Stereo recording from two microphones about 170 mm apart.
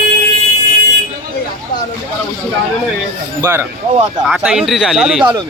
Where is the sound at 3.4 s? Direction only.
15° right (ahead or behind).